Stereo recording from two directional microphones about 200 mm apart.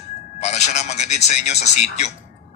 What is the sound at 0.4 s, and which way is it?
A man's voice, 35° left (ahead or behind).